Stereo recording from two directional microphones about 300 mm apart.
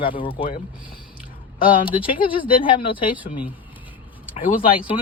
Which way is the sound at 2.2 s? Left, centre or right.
Centre.